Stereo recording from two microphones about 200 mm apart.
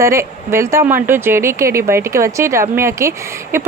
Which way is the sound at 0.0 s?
15° right (ahead or behind).